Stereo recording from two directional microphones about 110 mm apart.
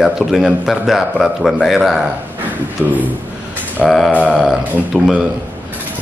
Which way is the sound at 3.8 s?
Centre (ahead or behind).